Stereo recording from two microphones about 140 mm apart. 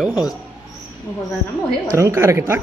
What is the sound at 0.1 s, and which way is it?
Speech, 25° left (ahead or behind).